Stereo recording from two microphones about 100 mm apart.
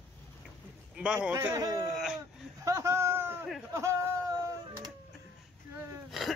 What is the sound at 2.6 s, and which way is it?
A man's voice, 30° right (ahead or behind).